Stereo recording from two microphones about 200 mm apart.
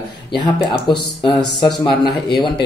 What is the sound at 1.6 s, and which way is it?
Speech, centre (ahead or behind).